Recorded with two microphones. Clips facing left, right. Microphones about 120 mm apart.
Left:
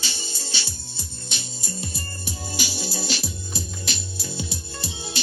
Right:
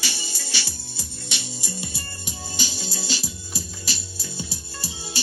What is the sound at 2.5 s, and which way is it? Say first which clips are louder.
Music: left 2 dB; 10° left (ahead or behind).